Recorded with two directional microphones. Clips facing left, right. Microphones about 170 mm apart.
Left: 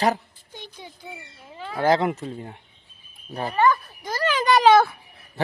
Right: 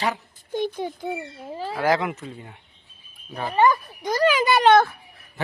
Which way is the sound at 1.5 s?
35° right (ahead or behind).